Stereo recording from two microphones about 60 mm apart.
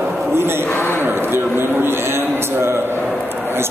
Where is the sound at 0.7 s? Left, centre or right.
Left.